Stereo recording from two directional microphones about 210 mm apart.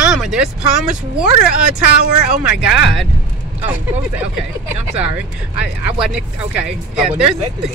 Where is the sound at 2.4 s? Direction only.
5° right (ahead or behind).